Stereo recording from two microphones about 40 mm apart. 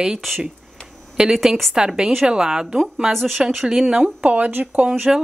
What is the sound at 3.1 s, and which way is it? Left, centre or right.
Speech, centre.